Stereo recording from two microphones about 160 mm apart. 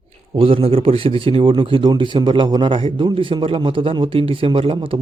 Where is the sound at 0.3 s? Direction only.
35° right (ahead or behind).